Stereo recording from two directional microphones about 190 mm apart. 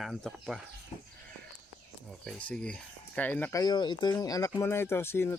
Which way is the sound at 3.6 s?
20° left (ahead or behind).